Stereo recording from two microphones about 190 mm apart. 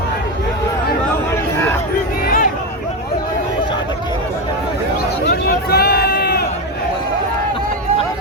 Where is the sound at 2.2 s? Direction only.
50° left (ahead or behind).